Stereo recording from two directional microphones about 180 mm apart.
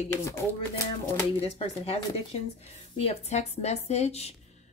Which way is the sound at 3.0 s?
40° left (ahead or behind).